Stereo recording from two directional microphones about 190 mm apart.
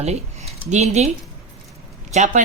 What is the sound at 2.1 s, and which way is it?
Speech, 40° right (ahead or behind).